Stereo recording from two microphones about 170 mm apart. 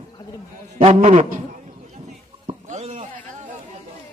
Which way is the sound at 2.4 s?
40° right (ahead or behind).